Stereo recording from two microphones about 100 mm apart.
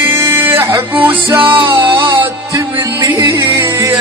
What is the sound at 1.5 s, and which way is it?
Music, 55° right (ahead or behind).